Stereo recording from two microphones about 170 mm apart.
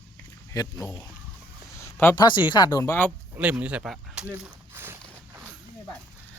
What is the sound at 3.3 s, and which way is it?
Speech, 10° right (ahead or behind).